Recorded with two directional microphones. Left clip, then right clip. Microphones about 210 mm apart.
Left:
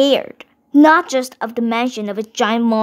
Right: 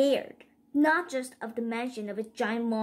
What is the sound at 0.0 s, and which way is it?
A woman's voice, 40° left (ahead or behind).